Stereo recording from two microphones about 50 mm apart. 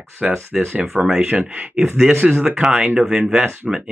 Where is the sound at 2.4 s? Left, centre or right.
Centre.